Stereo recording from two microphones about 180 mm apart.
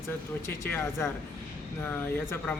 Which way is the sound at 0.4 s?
15° left (ahead or behind).